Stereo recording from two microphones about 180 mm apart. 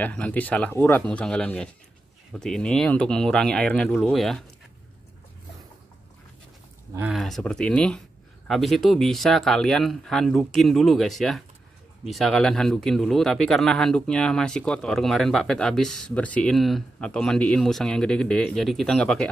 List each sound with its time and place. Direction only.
0.0 s speech: 10° left (ahead or behind)
7.1 s speech: centre (ahead or behind)